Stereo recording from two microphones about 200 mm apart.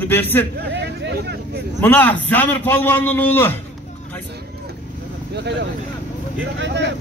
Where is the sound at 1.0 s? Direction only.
55° right (ahead or behind).